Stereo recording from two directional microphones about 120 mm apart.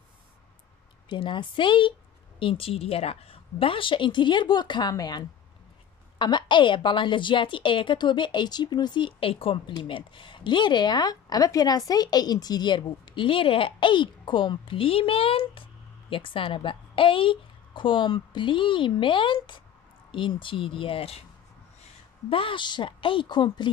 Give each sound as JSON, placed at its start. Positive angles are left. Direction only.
{"t": 1.0, "sound": "a woman's voice", "side_deg": 40}
{"t": 22.3, "sound": "a woman's voice", "side_deg": 45}